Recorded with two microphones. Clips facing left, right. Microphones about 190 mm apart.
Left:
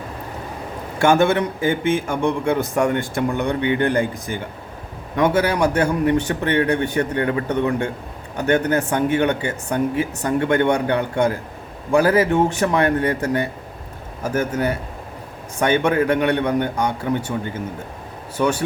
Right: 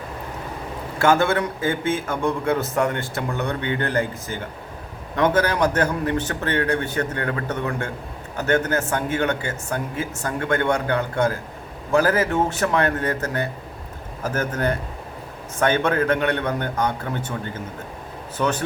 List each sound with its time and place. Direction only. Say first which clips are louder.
0.9 s a man's voice: left 3 dB; 15° left (ahead or behind)
14.3 s a man's voice: left 3 dB; 10° left (ahead or behind)